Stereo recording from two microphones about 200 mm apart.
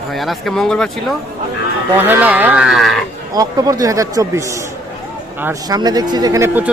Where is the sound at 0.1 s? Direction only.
Centre (ahead or behind).